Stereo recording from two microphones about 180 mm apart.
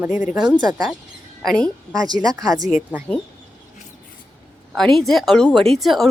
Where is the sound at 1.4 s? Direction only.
5° left (ahead or behind).